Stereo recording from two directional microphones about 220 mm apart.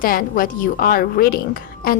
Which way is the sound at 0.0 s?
40° left (ahead or behind).